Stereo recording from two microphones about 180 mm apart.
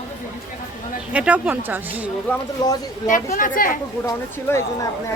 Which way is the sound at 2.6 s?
25° left (ahead or behind).